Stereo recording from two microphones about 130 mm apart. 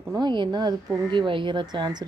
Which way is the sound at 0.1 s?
35° right (ahead or behind).